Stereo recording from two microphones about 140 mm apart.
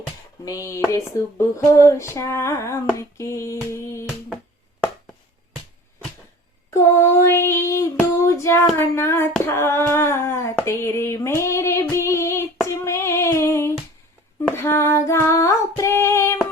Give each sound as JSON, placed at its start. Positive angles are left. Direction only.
{"t": 0.4, "sound": "a sound", "side_deg": 20}
{"t": 6.7, "sound": "female singing", "side_deg": 20}
{"t": 8.2, "sound": "child singing", "side_deg": 20}
{"t": 9.5, "sound": "female singing", "side_deg": 20}